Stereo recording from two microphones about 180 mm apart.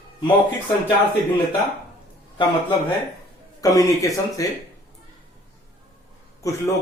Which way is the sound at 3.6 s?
20° left (ahead or behind).